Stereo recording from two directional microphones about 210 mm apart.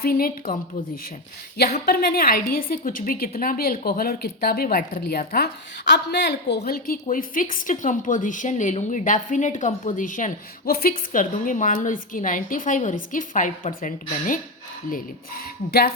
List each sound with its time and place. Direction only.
0.0 s a woman's voice: 45° left (ahead or behind)
1.8 s a woman's voice: 50° left (ahead or behind)